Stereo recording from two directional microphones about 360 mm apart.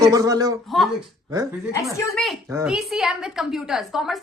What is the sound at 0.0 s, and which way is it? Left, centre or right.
A woman's voice, centre.